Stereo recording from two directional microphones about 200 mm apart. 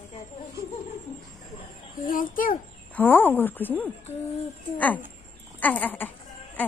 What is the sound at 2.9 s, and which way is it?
Speech, 10° left (ahead or behind).